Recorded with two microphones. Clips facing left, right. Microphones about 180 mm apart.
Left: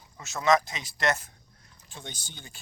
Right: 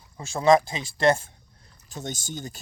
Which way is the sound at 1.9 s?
45° right (ahead or behind).